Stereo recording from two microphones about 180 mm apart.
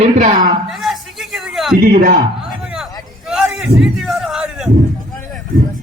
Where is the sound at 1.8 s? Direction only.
50° right (ahead or behind).